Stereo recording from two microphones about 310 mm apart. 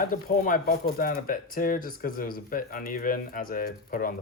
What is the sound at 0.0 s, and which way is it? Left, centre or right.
Speech, left.